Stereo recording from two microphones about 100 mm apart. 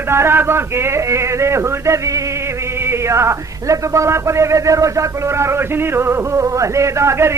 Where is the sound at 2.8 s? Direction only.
25° right (ahead or behind).